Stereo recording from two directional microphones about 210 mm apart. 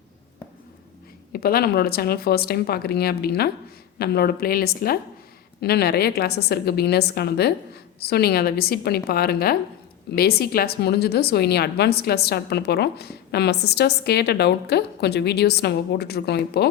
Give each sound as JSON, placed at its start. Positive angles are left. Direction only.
{"t": 1.3, "sound": "a woman's voice", "side_deg": 45}